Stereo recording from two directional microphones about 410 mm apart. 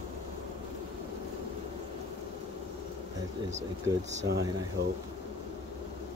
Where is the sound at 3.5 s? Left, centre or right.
Centre.